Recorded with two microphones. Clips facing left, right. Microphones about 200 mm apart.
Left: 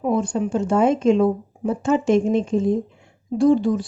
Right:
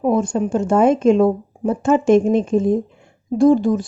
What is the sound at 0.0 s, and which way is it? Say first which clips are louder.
A woman's voice: right 3 dB; 45° right (ahead or behind).